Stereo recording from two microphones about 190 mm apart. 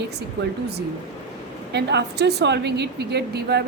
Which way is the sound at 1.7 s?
60° right (ahead or behind).